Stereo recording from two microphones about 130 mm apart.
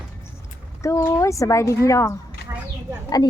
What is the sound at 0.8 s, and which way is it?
Speech, 25° left (ahead or behind).